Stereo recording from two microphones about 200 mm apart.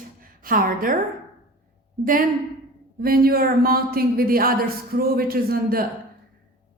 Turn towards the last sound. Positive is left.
turn(degrees=-50)  # may be behind; listen again after turning